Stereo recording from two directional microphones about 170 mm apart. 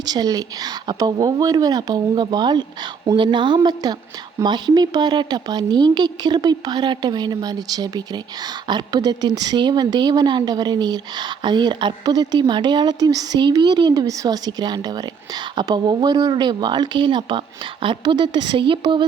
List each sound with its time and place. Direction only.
0.0 s speech: 25° right (ahead or behind)